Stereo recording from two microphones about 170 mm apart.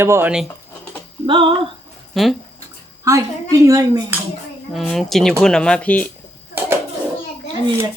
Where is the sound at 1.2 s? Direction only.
30° right (ahead or behind).